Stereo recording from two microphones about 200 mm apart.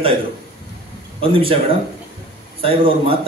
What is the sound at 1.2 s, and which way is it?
Speech, 25° right (ahead or behind).